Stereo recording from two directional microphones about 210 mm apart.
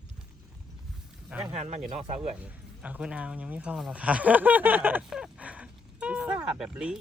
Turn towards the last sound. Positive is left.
turn(degrees=-5)  # may be behind; listen again after turning